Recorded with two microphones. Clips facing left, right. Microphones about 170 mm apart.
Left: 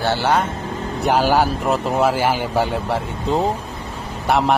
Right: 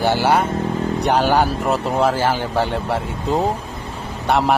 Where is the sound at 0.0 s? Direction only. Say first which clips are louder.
Right 2 dB; 10° right (ahead or behind).